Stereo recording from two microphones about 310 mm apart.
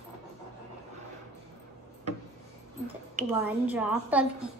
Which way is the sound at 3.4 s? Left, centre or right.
Centre.